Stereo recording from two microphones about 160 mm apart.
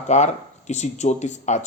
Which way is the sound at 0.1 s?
45° left (ahead or behind).